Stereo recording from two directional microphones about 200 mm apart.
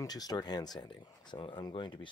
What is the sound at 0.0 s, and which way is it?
Speech, 20° left (ahead or behind).